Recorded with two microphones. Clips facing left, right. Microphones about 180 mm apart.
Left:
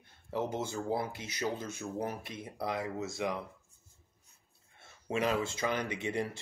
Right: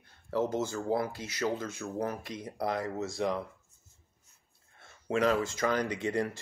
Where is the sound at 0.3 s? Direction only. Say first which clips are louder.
Right 4 dB; 10° left (ahead or behind).